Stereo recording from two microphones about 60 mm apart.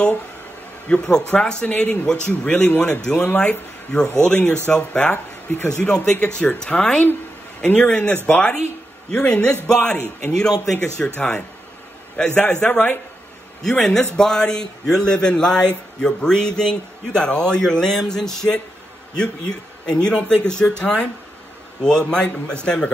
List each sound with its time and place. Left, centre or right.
0.8 s a man's voice: centre
2.5 s a man's voice: left
2.8 s a man's voice: centre
5.1 s speech: left
5.8 s a man's voice: centre
6.6 s a man's voice: centre